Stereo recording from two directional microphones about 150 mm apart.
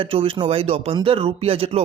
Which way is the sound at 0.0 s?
35° right (ahead or behind).